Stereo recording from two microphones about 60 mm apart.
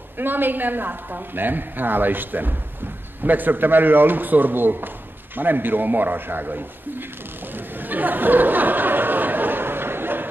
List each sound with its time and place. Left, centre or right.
0.2 s a man's voice: right
7.5 s chatter: right